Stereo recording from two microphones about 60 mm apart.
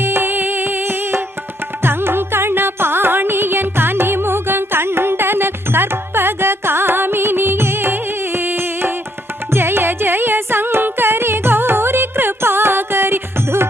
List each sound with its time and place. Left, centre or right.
0.0 s music: right